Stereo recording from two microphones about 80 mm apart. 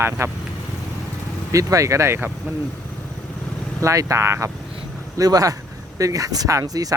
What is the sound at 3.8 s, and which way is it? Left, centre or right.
Speech, right.